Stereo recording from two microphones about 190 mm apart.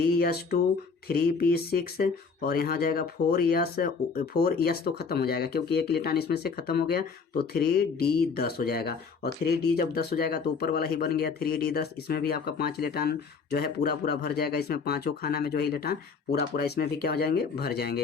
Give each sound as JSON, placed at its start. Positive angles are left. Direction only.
{"t": 0.1, "sound": "speech", "side_deg": 55}